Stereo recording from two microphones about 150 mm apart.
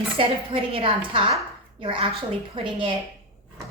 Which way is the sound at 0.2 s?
35° right (ahead or behind).